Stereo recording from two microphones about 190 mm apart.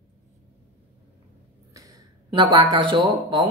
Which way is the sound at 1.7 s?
15° right (ahead or behind).